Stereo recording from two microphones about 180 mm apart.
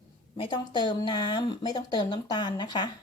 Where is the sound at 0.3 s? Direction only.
25° left (ahead or behind).